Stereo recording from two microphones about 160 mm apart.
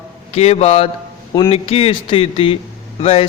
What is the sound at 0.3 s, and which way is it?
A man's voice, 40° left (ahead or behind).